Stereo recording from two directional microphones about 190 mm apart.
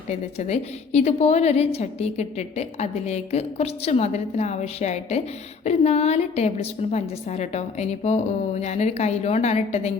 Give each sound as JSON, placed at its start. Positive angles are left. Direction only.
{"t": 0.1, "sound": "a woman's voice", "side_deg": 35}